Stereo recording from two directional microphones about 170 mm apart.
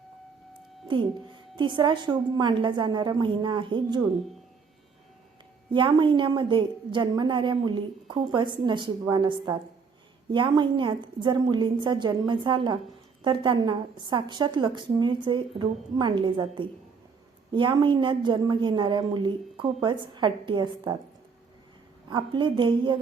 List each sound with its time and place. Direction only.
0.9 s a woman's voice: 30° right (ahead or behind)
5.7 s a woman's voice: 30° right (ahead or behind)
22.1 s a woman's voice: 30° right (ahead or behind)